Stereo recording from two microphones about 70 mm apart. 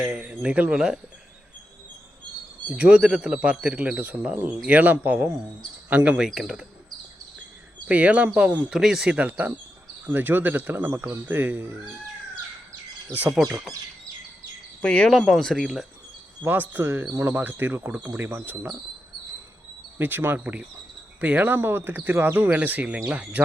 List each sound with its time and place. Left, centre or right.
0.0 s speech: centre
2.6 s speech: centre
7.9 s speech: centre
8.7 s speech: centre
9.1 s speech: centre
13.3 s speech: centre
14.8 s speech: centre
15.5 s speech: centre
16.5 s speech: right
20.0 s speech: right
20.4 s speech: centre